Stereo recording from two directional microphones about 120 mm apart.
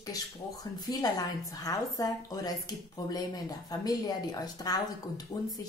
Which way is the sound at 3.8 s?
35° left (ahead or behind).